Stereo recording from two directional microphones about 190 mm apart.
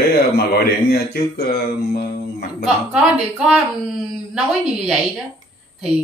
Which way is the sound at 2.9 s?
5° right (ahead or behind).